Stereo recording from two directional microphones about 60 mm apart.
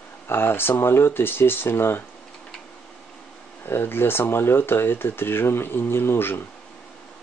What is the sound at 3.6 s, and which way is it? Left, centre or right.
Speech, left.